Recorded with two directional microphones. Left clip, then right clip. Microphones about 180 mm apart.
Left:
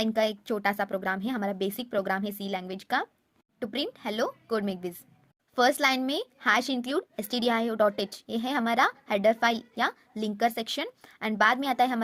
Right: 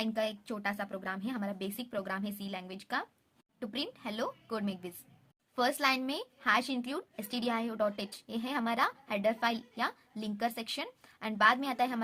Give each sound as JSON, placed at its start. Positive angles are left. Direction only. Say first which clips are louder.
{"t": 0.0, "sound": "a woman's voice", "louder": "left 7 dB", "side_deg": 35}